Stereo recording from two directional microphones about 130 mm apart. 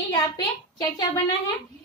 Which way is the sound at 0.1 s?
30° left (ahead or behind).